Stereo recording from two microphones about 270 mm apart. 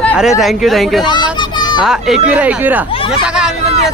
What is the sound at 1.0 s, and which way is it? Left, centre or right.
Children playing, centre.